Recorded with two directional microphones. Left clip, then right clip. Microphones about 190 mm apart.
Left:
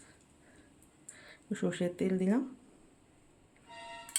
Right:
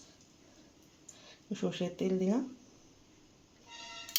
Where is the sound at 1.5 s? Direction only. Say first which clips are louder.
Left 2 dB; 20° left (ahead or behind).